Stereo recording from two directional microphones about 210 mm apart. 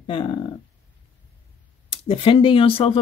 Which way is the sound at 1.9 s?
25° left (ahead or behind).